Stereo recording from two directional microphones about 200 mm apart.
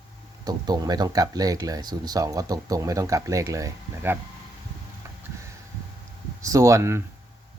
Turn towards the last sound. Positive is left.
turn(degrees=-15)  # may be behind; listen again after turning